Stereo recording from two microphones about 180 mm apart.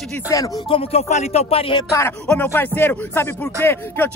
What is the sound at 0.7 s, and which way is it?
Speech, 35° left (ahead or behind).